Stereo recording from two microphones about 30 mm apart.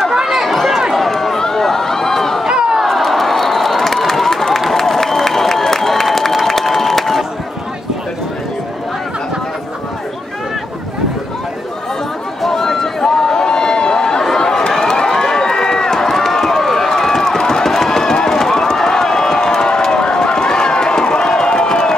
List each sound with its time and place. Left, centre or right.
0.1 s run: centre
0.4 s run: centre
1.4 s a sound: centre
2.4 s chatter: right
2.8 s crowd: centre
5.6 s a sound: centre
6.1 s applause: centre
12.4 s run: centre